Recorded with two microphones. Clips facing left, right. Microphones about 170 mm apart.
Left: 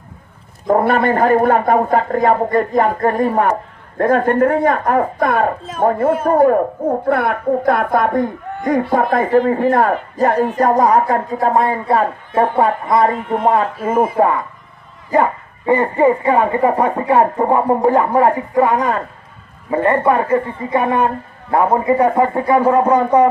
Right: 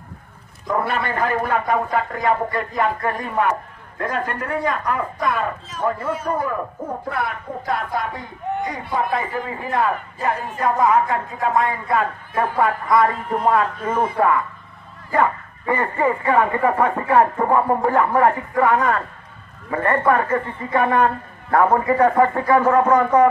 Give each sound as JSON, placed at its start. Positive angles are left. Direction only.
{"t": 0.7, "sound": "a man's voice", "side_deg": 50}